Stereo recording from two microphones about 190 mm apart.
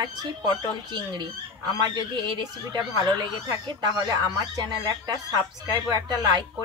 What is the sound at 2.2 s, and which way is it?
Speech, 25° right (ahead or behind).